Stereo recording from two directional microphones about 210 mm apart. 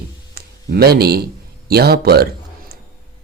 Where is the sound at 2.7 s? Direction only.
50° right (ahead or behind).